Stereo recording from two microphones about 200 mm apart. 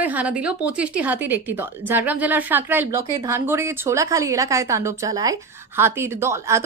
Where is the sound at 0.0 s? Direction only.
5° right (ahead or behind).